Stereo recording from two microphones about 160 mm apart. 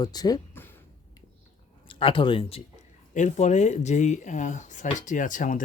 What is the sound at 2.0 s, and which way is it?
Speech, 30° left (ahead or behind).